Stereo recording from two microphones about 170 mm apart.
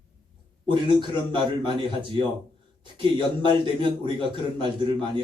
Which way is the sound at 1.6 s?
30° right (ahead or behind).